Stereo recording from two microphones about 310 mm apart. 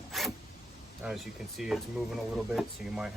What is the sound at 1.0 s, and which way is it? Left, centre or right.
Speech, centre.